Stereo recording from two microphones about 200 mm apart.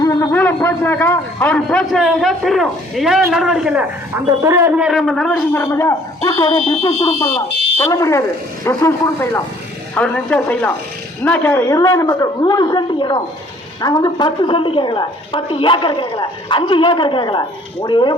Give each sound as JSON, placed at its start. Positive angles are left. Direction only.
{"t": 0.0, "sound": "a man's voice", "side_deg": 15}
{"t": 4.9, "sound": "a man's voice", "side_deg": 0}
{"t": 7.8, "sound": "a woman's voice", "side_deg": 15}